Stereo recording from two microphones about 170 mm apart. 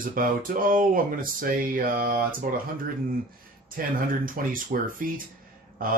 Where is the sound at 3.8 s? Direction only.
55° right (ahead or behind).